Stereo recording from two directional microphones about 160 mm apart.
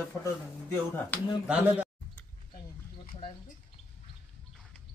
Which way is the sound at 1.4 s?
10° right (ahead or behind).